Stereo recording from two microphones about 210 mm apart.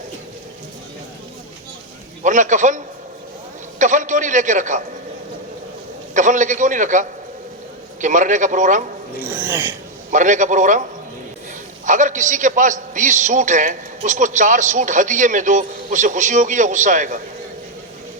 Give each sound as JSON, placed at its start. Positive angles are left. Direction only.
{"t": 2.2, "sound": "a man's voice", "side_deg": -35}
{"t": 6.1, "sound": "a man's voice", "side_deg": -35}
{"t": 9.3, "sound": "speech", "side_deg": -10}
{"t": 10.1, "sound": "a man's voice", "side_deg": -35}
{"t": 11.9, "sound": "a man's voice", "side_deg": -35}